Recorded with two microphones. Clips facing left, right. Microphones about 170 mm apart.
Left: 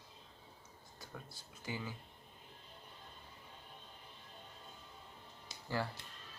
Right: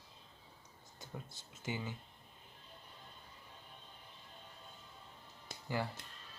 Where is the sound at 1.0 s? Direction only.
25° right (ahead or behind).